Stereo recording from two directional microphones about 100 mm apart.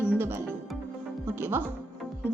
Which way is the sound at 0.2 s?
25° right (ahead or behind).